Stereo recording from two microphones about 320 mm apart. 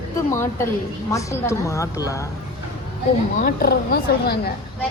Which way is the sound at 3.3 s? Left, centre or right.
Left.